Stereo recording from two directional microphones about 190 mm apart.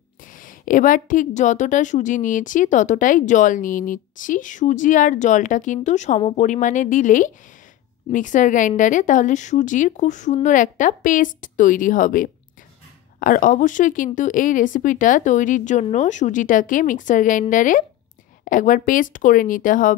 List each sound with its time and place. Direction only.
0.2 s a woman's voice: 45° left (ahead or behind)